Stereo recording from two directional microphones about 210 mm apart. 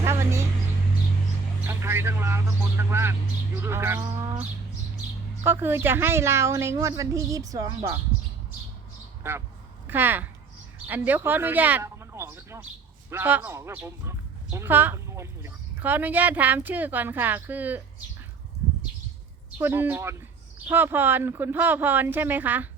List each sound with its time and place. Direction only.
0.0 s vehicle: 10° right (ahead or behind)
1.6 s a woman's voice: 10° right (ahead or behind)
4.0 s bird: 20° right (ahead or behind)
5.4 s a woman's voice: 10° right (ahead or behind)
9.8 s a woman's voice: 10° right (ahead or behind)
19.5 s a woman's voice: 10° right (ahead or behind)